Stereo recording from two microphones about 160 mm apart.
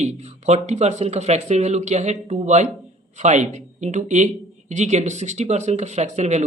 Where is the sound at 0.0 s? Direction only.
45° right (ahead or behind).